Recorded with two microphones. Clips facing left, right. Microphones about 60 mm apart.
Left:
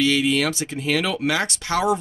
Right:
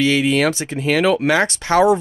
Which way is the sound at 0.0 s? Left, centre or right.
Right.